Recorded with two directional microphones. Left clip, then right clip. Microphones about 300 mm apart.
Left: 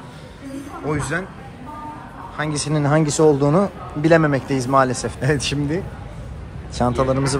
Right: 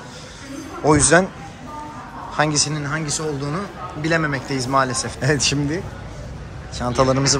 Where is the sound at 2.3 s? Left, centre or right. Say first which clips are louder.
Right 4 dB; centre.